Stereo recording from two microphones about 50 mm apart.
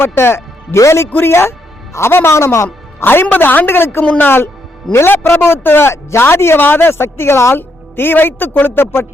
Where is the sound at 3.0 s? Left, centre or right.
Left.